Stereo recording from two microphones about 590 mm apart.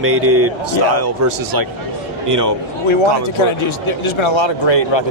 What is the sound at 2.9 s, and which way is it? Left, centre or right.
A man's voice, left.